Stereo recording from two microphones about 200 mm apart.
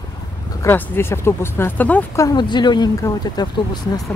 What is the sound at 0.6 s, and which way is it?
Speech, 10° left (ahead or behind).